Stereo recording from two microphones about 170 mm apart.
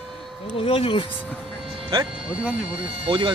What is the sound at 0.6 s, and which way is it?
Speech, 35° left (ahead or behind).